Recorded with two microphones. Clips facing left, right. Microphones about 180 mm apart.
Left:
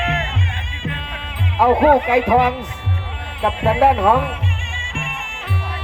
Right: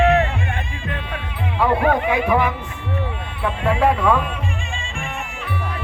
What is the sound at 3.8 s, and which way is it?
Speech, 70° left (ahead or behind).